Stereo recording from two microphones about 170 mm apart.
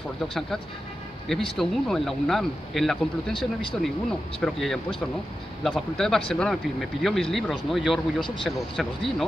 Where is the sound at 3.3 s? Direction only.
30° left (ahead or behind).